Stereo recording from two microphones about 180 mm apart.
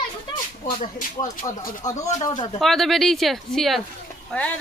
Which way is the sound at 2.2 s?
25° left (ahead or behind).